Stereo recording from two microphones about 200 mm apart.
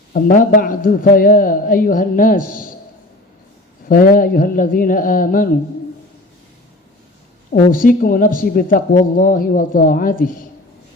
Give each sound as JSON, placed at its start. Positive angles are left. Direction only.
{"t": 0.1, "sound": "speech", "side_deg": 45}
{"t": 3.8, "sound": "speech", "side_deg": 45}
{"t": 7.5, "sound": "speech", "side_deg": 45}